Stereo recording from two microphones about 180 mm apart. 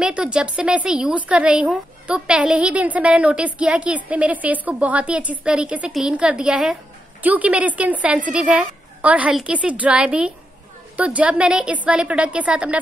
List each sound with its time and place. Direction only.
0.0 s a woman's voice: 5° right (ahead or behind)